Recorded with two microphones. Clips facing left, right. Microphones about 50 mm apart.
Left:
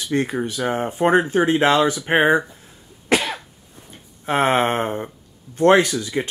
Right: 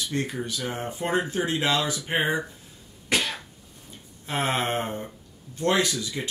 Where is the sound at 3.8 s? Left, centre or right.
Left.